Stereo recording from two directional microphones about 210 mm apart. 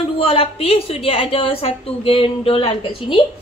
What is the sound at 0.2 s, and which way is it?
A woman's voice, 25° left (ahead or behind).